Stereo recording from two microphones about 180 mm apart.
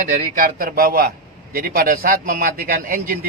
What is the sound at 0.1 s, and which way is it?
A man's voice, 50° right (ahead or behind).